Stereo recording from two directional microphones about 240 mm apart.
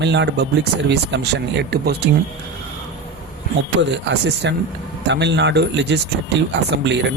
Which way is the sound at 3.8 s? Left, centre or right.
Right.